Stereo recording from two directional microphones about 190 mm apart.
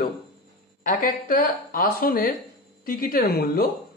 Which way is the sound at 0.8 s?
45° left (ahead or behind).